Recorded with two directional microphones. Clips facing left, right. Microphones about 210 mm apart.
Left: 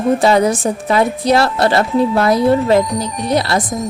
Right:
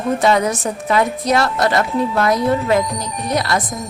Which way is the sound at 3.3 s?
30° left (ahead or behind).